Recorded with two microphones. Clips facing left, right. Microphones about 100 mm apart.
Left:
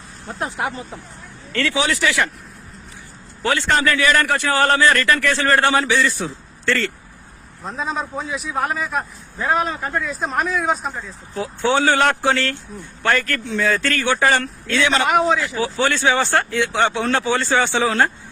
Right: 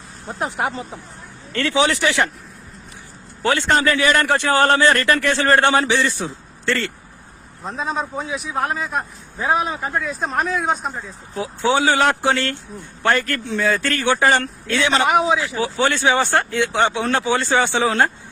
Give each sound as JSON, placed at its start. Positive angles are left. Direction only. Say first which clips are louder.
{"t": 0.3, "sound": "a man's voice", "louder": "right 2 dB", "side_deg": -20}
{"t": 3.4, "sound": "a man's voice", "louder": "right 1 dB", "side_deg": -20}
{"t": 7.6, "sound": "a man's voice", "louder": "right 1 dB", "side_deg": 0}